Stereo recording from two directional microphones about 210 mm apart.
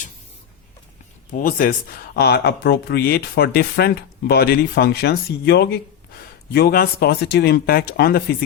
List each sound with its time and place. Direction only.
1.4 s speech: 45° left (ahead or behind)